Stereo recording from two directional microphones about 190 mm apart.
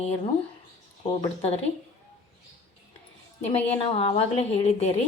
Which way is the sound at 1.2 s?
35° left (ahead or behind).